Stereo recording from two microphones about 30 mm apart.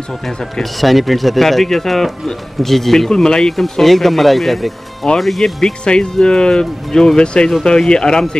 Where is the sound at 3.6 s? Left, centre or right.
Centre.